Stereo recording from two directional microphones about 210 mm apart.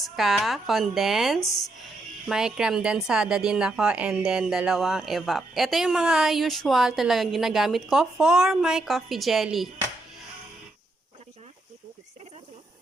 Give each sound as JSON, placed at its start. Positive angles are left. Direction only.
{"t": 0.0, "sound": "speech", "side_deg": 0}